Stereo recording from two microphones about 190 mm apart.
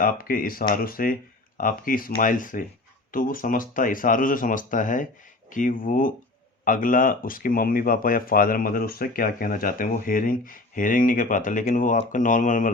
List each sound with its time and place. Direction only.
0.0 s speech: 50° left (ahead or behind)